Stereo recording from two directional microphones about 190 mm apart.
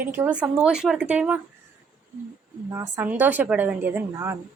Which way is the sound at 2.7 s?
15° right (ahead or behind).